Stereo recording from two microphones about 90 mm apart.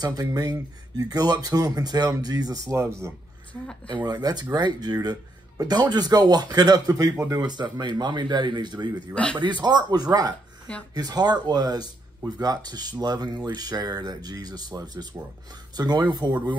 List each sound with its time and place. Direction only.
0.0 s speech: 45° right (ahead or behind)
4.0 s speech: 45° right (ahead or behind)
7.3 s speech: 50° right (ahead or behind)
9.1 s speech: 10° left (ahead or behind)
9.4 s speech: 50° right (ahead or behind)